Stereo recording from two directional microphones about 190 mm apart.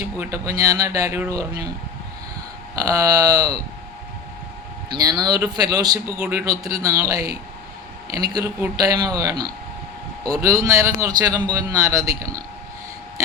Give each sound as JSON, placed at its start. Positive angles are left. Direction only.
{"t": 0.0, "sound": "speech", "side_deg": -10}
{"t": 2.7, "sound": "speech", "side_deg": -20}
{"t": 4.9, "sound": "speech", "side_deg": -20}
{"t": 6.1, "sound": "a man's voice", "side_deg": -5}
{"t": 6.8, "sound": "speech", "side_deg": -15}